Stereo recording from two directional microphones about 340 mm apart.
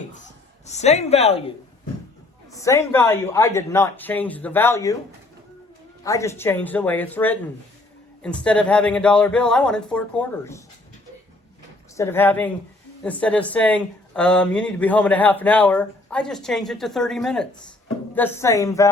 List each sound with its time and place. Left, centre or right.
0.6 s a woman's voice: centre
6.0 s speech: centre
11.9 s speech: centre